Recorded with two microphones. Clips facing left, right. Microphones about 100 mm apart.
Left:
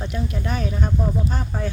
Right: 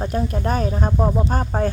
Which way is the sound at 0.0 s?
40° right (ahead or behind).